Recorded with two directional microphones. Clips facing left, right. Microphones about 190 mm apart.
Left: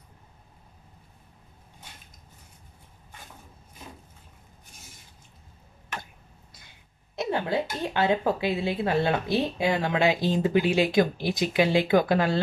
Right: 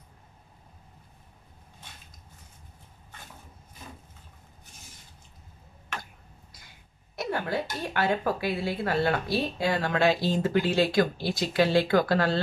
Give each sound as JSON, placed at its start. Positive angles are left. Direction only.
{"t": 7.2, "sound": "speech", "side_deg": 20}